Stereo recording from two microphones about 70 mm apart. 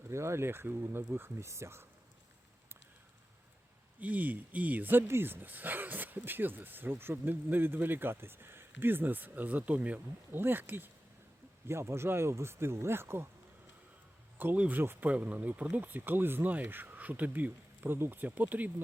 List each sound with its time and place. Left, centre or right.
0.1 s speech: right
4.0 s speech: right
14.5 s speech: right